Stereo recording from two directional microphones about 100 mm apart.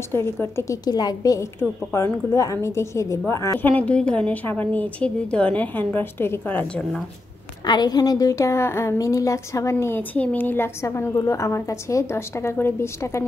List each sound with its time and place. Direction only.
0.1 s a woman's voice: 25° left (ahead or behind)
0.8 s a woman's voice: 40° left (ahead or behind)
1.6 s a woman's voice: 25° left (ahead or behind)
3.5 s a woman's voice: 15° left (ahead or behind)
7.6 s a woman's voice: 45° left (ahead or behind); by 13.2 s 30° left (ahead or behind)